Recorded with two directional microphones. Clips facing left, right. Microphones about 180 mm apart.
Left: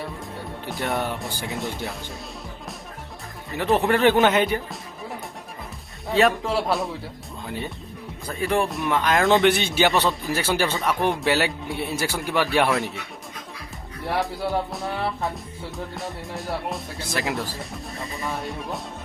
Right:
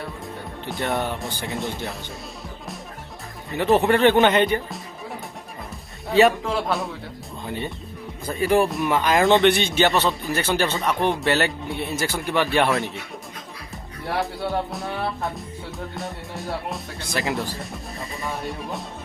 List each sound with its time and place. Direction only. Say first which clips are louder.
0.7 s speech: right 1 dB; centre (ahead or behind)
3.5 s speech: right 2 dB; centre (ahead or behind)
6.1 s speech: right 3 dB; centre (ahead or behind)
8.4 s speech: right 4 dB; 5° right (ahead or behind)
14.1 s speech: even; centre (ahead or behind)